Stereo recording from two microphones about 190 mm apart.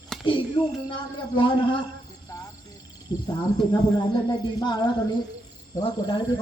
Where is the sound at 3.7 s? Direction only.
25° left (ahead or behind).